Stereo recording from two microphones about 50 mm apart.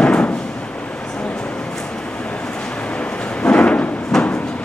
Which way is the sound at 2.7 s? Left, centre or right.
Left.